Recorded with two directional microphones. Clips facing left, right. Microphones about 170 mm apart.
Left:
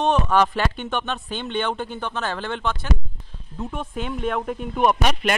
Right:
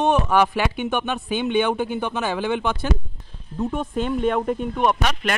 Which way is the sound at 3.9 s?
5° left (ahead or behind).